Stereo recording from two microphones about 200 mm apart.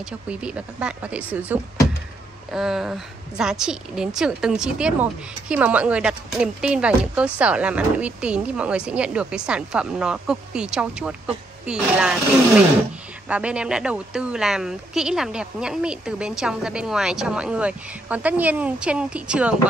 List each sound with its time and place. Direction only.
0.3 s speech: 5° right (ahead or behind)
2.5 s speech: centre (ahead or behind)
13.3 s speech: 5° right (ahead or behind)